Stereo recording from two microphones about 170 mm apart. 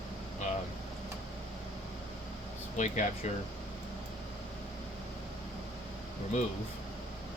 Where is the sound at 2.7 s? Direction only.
45° left (ahead or behind).